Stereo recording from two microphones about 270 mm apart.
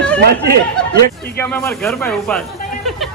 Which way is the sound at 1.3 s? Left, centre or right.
Centre.